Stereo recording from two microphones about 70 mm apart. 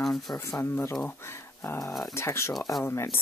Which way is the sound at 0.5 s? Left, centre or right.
Left.